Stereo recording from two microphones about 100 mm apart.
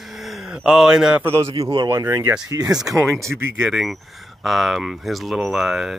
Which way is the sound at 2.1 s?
25° right (ahead or behind).